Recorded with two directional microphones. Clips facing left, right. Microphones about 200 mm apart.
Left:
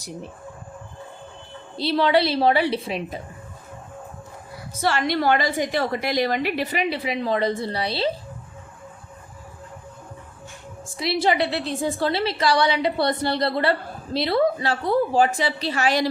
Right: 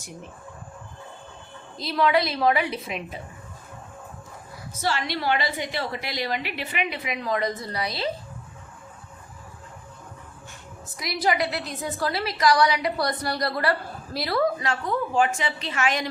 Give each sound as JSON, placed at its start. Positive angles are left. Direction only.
{"t": 1.7, "sound": "a woman's voice", "side_deg": 30}
{"t": 4.8, "sound": "a woman's voice", "side_deg": 55}
{"t": 10.8, "sound": "a woman's voice", "side_deg": 30}